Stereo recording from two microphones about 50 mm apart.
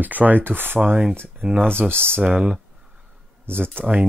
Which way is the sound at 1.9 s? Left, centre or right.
Right.